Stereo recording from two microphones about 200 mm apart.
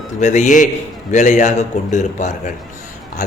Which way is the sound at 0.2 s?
35° left (ahead or behind).